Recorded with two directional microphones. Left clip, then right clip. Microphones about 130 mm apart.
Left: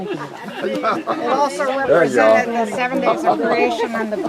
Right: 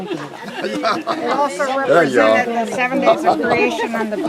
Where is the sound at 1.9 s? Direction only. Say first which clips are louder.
Right 1 dB; 45° right (ahead or behind).